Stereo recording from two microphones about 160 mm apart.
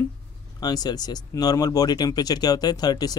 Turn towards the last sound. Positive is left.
turn(degrees=25)  # may be behind; listen again after turning